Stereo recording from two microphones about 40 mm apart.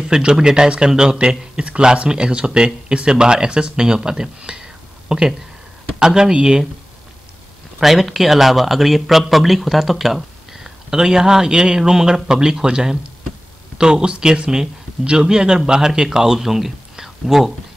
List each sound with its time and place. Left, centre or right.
0.1 s speech: right
4.5 s whispering: right
5.0 s speech: centre
7.8 s a man's voice: centre